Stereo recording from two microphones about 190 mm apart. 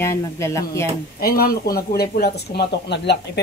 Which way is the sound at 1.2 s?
50° left (ahead or behind).